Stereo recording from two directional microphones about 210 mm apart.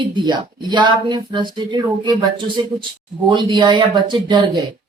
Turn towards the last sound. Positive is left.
turn(degrees=-20)  # may be behind; listen again after turning